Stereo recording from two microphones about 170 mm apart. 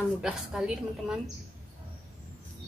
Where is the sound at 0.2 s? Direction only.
5° right (ahead or behind).